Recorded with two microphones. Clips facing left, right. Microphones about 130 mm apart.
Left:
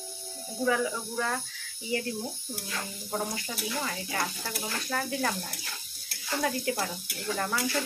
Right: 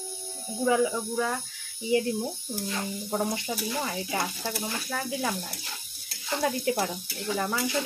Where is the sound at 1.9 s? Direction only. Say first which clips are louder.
Right 7 dB; 20° right (ahead or behind).